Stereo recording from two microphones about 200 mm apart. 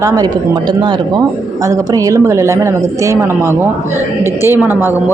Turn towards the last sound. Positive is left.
turn(degrees=-10)  # may be behind; listen again after turning